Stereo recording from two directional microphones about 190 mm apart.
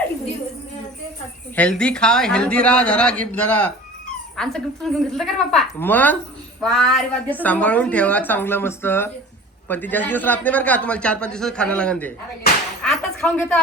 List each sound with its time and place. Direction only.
1.5 s a man's voice: 5° left (ahead or behind)